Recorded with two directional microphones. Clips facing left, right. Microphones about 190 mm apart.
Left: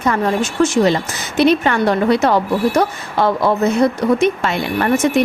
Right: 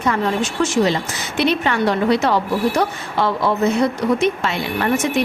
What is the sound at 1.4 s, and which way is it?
A woman's voice, 45° left (ahead or behind).